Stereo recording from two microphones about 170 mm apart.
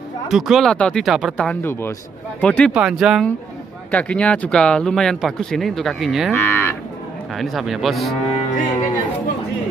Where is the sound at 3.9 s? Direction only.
5° left (ahead or behind).